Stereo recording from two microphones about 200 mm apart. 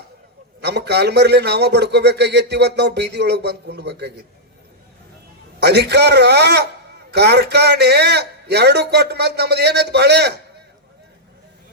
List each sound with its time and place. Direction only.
0.6 s a man's voice: 55° right (ahead or behind)
5.5 s a man's voice: 55° right (ahead or behind)